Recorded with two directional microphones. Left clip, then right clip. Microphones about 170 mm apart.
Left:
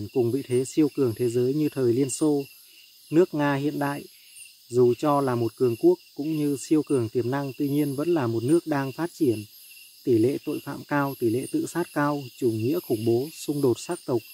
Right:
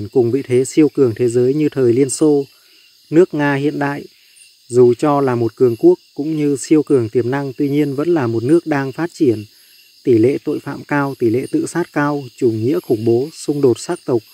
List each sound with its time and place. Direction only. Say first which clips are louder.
0.0 s speech: right 10 dB; 25° right (ahead or behind)